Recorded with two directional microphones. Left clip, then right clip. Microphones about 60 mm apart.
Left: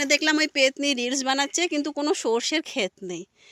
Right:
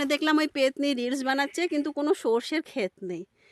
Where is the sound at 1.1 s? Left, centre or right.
Right.